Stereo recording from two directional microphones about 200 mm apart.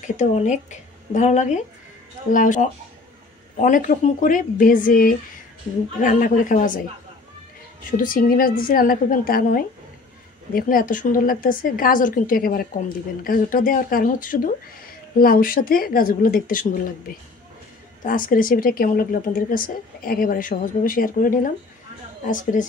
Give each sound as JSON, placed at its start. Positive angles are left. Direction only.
{"t": 0.0, "sound": "speech", "side_deg": 35}
{"t": 8.0, "sound": "speech", "side_deg": 45}
{"t": 18.0, "sound": "speech", "side_deg": 45}